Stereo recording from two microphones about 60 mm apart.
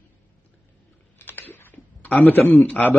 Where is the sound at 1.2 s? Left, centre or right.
Left.